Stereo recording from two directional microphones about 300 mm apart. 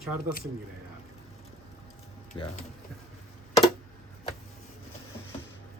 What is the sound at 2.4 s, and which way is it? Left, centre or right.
Speech, centre.